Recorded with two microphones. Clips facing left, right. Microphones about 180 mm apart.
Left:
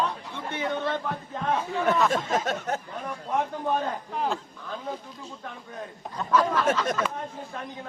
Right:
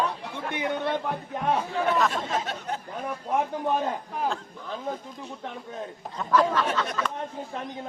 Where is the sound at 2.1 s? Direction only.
45° left (ahead or behind).